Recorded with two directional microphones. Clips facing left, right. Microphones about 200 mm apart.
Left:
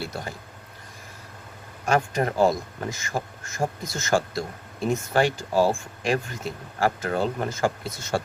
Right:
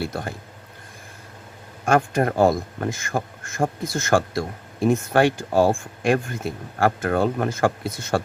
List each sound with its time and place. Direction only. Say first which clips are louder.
0.0 s a man's voice: right 5 dB; 55° right (ahead or behind)
1.8 s a man's voice: right 4 dB; 50° right (ahead or behind)